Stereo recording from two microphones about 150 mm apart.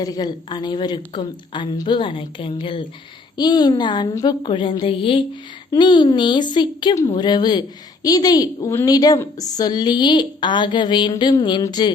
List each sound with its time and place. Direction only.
0.0 s a woman's voice: 25° left (ahead or behind)